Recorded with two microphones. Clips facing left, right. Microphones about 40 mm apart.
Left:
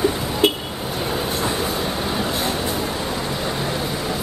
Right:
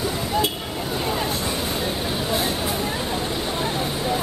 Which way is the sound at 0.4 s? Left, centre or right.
Left.